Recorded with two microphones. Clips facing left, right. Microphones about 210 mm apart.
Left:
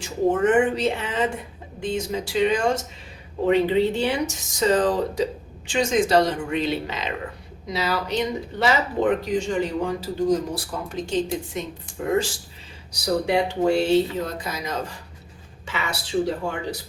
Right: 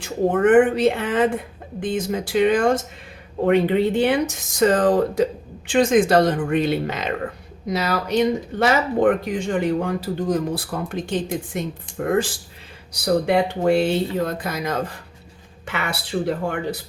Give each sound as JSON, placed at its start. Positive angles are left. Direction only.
{"t": 0.0, "sound": "speech", "side_deg": -55}